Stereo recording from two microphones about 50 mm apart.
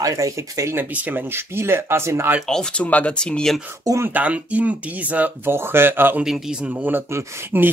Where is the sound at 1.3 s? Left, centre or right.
Right.